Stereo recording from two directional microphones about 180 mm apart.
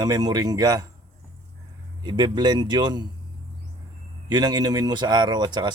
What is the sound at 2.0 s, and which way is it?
Speech, 25° right (ahead or behind).